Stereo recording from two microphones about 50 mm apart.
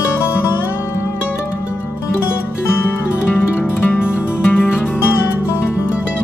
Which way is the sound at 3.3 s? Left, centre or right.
Left.